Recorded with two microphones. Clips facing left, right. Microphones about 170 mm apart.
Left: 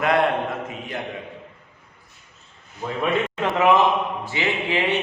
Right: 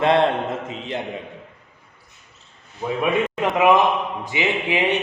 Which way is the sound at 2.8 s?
10° right (ahead or behind).